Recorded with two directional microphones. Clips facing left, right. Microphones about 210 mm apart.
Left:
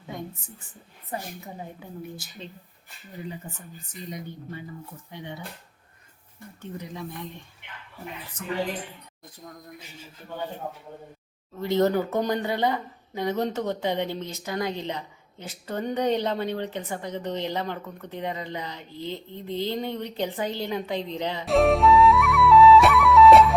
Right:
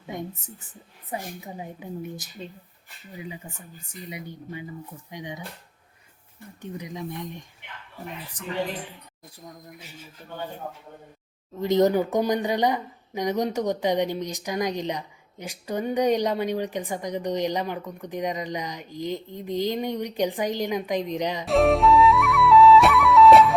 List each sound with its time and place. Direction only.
1.1 s speech: 15° right (ahead or behind)
6.6 s speech: 15° right (ahead or behind)
11.5 s speech: 15° right (ahead or behind)
21.4 s flute: centre (ahead or behind)